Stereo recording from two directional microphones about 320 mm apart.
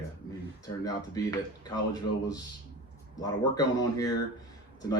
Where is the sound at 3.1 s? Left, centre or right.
Centre.